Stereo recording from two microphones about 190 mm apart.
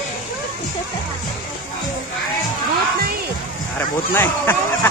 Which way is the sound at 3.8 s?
10° left (ahead or behind).